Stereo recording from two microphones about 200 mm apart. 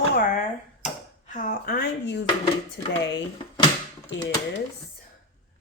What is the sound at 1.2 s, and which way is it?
Speech, 40° left (ahead or behind).